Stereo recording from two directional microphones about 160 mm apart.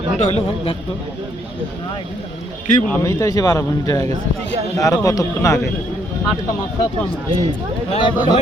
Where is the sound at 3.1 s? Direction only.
20° left (ahead or behind).